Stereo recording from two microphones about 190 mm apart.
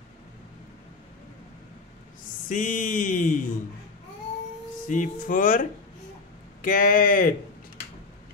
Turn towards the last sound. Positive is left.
turn(degrees=50)  # may be behind; listen again after turning